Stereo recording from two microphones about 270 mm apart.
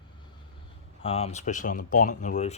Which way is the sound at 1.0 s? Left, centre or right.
Left.